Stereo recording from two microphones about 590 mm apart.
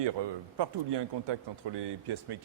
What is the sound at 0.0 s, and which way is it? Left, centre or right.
A man's voice, right.